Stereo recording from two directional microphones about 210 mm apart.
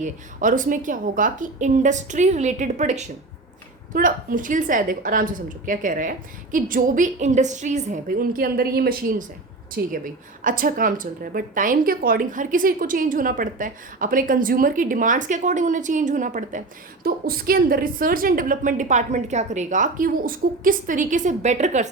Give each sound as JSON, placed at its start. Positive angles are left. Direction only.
{"t": 0.0, "sound": "a woman's voice", "side_deg": -40}